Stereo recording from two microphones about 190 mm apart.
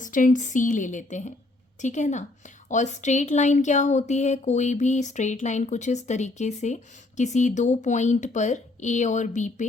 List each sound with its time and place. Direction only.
0.0 s speech: 45° left (ahead or behind)